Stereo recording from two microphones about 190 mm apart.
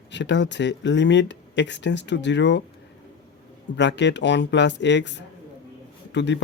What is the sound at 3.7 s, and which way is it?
Speech, 70° left (ahead or behind).